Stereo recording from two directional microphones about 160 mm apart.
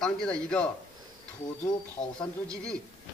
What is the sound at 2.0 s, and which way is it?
Speech, 25° left (ahead or behind).